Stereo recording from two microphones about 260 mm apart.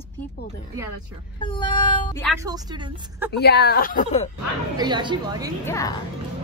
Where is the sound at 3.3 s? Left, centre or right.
Left.